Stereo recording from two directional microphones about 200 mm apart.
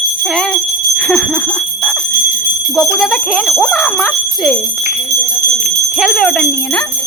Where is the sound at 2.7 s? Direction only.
Centre (ahead or behind).